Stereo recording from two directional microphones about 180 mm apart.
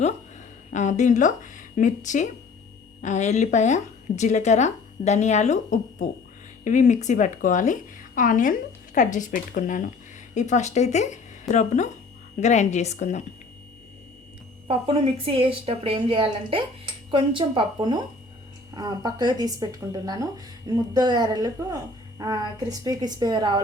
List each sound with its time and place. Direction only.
0.7 s a woman's voice: 40° left (ahead or behind)
14.7 s a woman's voice: 30° right (ahead or behind)
22.8 s a woman's voice: 20° right (ahead or behind)